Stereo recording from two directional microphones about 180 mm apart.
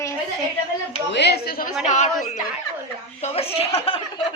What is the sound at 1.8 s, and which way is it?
Speech, 40° left (ahead or behind).